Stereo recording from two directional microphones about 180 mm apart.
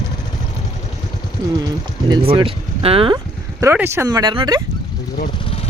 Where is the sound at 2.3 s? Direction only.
30° right (ahead or behind).